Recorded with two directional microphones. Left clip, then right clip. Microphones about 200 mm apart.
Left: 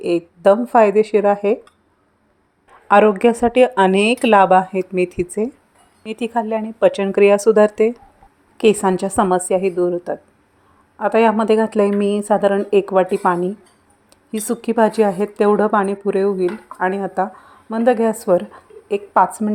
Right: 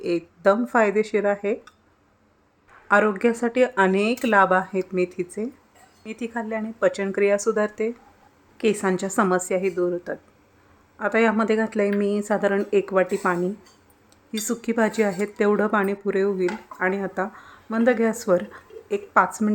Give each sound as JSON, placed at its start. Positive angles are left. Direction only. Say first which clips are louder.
{"t": 0.0, "sound": "a woman's voice", "louder": "left 6 dB", "side_deg": 10}
{"t": 2.8, "sound": "a woman's voice", "louder": "left 7 dB", "side_deg": 20}